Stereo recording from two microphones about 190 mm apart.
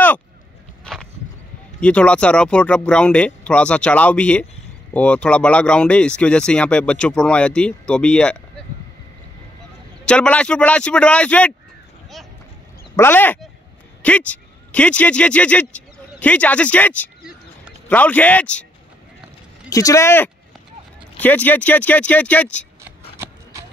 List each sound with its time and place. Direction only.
1.8 s speech: 5° left (ahead or behind)
10.0 s speech: 5° left (ahead or behind)
12.9 s speech: 10° left (ahead or behind)
19.7 s speech: 15° left (ahead or behind)